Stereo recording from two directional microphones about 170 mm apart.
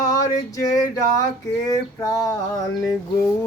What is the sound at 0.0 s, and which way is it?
Male singing, 20° left (ahead or behind).